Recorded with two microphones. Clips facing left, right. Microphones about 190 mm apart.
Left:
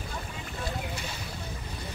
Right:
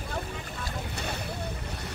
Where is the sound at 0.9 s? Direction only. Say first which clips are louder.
Right 3 dB; 65° right (ahead or behind).